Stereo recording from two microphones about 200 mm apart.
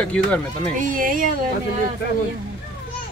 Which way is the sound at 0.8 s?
45° right (ahead or behind).